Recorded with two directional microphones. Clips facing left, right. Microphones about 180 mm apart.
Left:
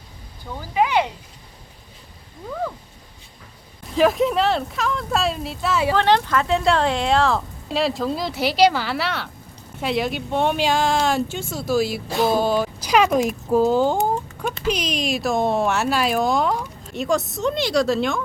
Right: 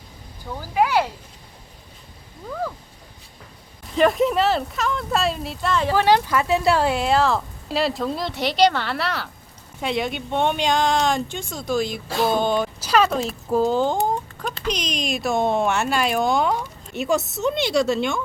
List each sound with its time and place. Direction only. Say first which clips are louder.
0.6 s speech: even; 5° right (ahead or behind)
3.9 s speech: even; centre (ahead or behind)
5.9 s speech: right 1 dB; 10° right (ahead or behind)